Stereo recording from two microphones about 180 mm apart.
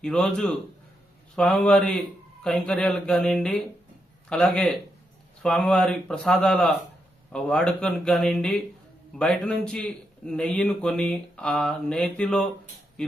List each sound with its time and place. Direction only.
0.0 s a man's voice: 5° left (ahead or behind)